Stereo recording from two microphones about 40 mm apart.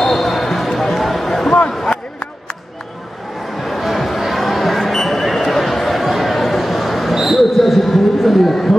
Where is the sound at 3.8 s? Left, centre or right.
Centre.